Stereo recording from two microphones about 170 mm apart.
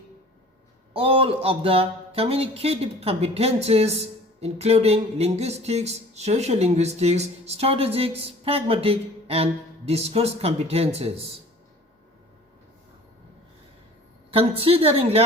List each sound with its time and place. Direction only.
0.9 s speech: 35° right (ahead or behind)
14.3 s speech: 35° right (ahead or behind)